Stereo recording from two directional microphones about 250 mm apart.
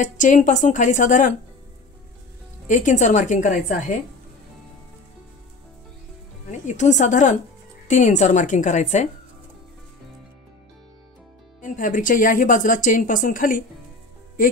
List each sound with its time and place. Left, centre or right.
0.0 s speech: left
2.7 s a woman's voice: left
6.5 s a woman's voice: left
11.6 s speech: left